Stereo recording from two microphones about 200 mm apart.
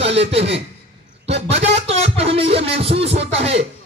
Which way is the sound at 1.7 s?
30° right (ahead or behind).